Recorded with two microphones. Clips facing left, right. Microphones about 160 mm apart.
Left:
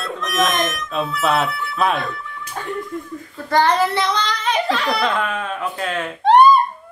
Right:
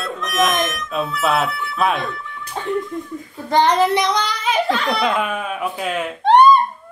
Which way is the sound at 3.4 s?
20° right (ahead or behind).